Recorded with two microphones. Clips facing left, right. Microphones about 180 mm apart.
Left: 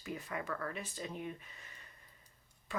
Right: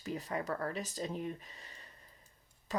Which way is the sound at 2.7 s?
40° right (ahead or behind).